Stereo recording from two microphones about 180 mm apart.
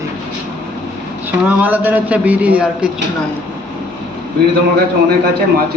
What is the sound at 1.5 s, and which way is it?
A man's voice, 10° right (ahead or behind).